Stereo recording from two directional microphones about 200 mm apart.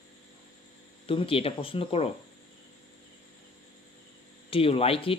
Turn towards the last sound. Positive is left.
turn(degrees=30)  # may be behind; listen again after turning